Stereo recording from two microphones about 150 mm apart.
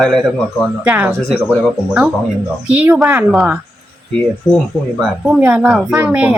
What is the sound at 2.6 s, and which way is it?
Speech, 10° right (ahead or behind).